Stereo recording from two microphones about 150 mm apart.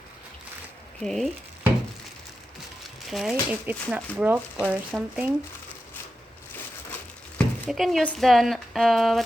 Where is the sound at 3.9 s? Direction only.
10° right (ahead or behind).